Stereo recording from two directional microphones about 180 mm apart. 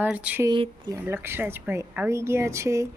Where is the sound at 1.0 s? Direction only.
15° right (ahead or behind).